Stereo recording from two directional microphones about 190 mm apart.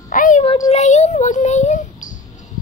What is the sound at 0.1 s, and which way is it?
Child singing, 45° left (ahead or behind).